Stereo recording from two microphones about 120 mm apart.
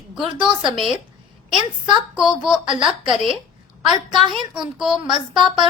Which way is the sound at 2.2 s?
5° right (ahead or behind).